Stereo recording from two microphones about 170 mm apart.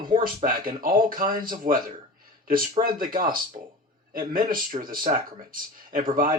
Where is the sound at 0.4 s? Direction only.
55° right (ahead or behind).